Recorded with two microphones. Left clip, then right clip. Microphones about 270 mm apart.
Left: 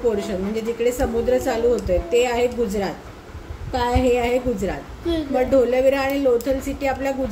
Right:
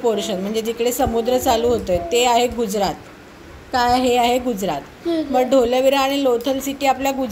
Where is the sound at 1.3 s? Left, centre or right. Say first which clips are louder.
Right 1 dB; centre.